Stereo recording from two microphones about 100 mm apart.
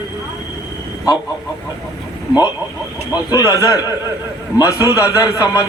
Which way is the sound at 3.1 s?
40° left (ahead or behind).